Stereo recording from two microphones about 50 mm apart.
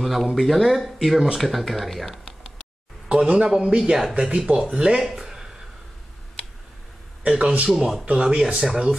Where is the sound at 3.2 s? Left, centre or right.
Centre.